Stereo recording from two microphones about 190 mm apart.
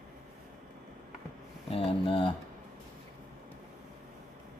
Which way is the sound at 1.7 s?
30° left (ahead or behind).